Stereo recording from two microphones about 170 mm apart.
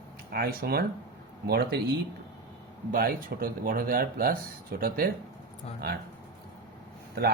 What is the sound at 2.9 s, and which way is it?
Speech, 55° right (ahead or behind).